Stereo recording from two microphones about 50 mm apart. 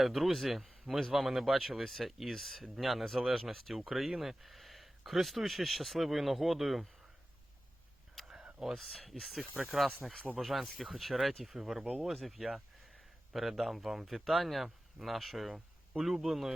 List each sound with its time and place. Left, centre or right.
0.0 s speech: centre
8.2 s a sound: centre
8.5 s speech: centre
8.8 s speech: centre
12.1 s speech: centre